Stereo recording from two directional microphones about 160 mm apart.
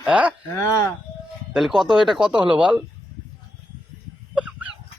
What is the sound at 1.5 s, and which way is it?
Speech, centre (ahead or behind).